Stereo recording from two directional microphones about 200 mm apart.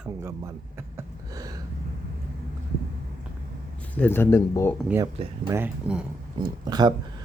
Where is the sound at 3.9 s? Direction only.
10° left (ahead or behind).